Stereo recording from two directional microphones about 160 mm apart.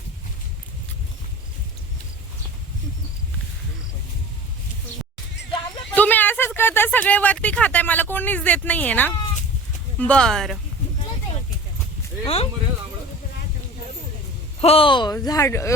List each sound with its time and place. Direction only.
5.9 s speech: 10° left (ahead or behind)
12.2 s speech: 40° left (ahead or behind)
14.6 s speech: 35° left (ahead or behind); by 15.7 s 20° left (ahead or behind)